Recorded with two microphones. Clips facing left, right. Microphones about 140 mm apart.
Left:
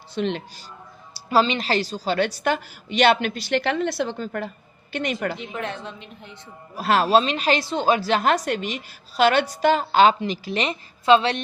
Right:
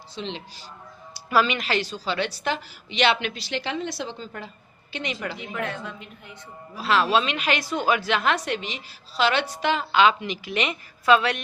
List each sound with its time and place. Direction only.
0.1 s speech: 55° left (ahead or behind)
1.1 s a woman's voice: 30° left (ahead or behind); by 5.4 s 50° left (ahead or behind)
5.5 s a woman's voice: 25° left (ahead or behind)
6.7 s a woman's voice: 45° left (ahead or behind); by 11.4 s 30° left (ahead or behind)